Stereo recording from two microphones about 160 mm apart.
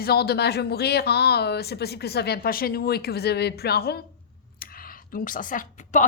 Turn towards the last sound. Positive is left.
turn(degrees=55)  # may be behind; listen again after turning